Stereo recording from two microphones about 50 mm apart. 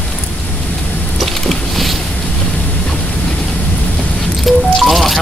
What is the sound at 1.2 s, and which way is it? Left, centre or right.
Vehicle, centre.